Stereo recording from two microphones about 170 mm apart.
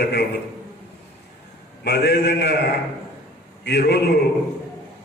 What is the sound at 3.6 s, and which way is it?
Speech, 80° left.